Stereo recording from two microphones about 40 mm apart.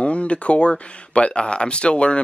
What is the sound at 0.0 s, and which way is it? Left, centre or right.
Speech, left.